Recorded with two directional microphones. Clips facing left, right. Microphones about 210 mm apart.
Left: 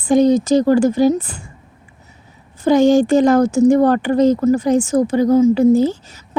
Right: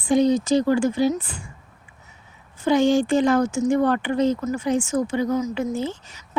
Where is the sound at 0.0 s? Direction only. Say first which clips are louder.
Left 6 dB; 45° left (ahead or behind).